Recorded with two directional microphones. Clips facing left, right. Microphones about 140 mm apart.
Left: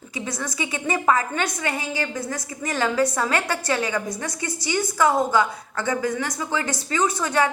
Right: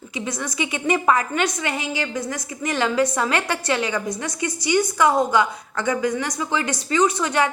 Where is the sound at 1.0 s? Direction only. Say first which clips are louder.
Left 2 dB; 30° left (ahead or behind).